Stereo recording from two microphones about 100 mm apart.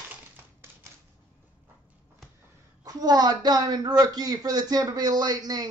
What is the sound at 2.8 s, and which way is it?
A woman's voice, 40° right (ahead or behind).